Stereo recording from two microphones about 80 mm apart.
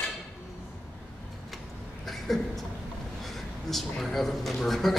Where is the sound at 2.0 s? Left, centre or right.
Centre.